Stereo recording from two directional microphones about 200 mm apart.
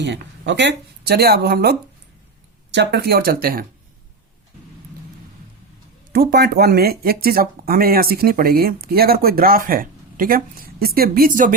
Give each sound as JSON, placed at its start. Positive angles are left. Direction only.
{"t": 0.0, "sound": "speech", "side_deg": -60}
{"t": 2.7, "sound": "speech", "side_deg": -50}
{"t": 6.1, "sound": "speech", "side_deg": -50}